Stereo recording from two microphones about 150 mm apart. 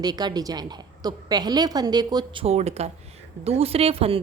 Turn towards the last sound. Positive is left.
turn(degrees=-40)  # may be behind; listen again after turning